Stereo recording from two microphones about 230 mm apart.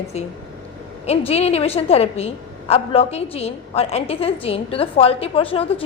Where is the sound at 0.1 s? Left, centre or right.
Left.